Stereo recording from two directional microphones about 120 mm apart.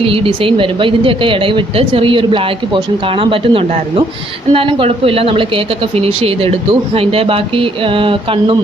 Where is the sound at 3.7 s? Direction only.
70° right (ahead or behind).